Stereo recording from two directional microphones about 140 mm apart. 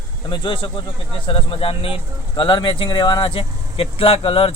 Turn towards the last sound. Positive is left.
turn(degrees=40)  # may be behind; listen again after turning